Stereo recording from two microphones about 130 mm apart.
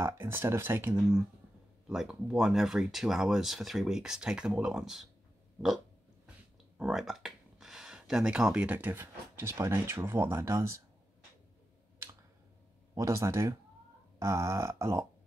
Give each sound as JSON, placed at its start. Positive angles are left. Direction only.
{"t": 0.0, "sound": "speech", "side_deg": -20}
{"t": 1.9, "sound": "speech", "side_deg": -5}
{"t": 6.8, "sound": "speech", "side_deg": 0}
{"t": 12.9, "sound": "speech", "side_deg": -25}